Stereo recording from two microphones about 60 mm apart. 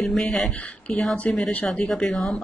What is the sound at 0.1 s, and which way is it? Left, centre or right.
Speech, centre.